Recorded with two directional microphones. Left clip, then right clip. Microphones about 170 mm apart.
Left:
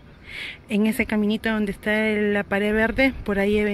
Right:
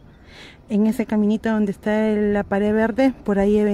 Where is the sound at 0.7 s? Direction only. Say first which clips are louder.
Right 1 dB; 40° right (ahead or behind).